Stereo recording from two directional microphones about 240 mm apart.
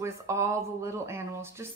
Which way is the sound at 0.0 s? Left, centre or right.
Centre.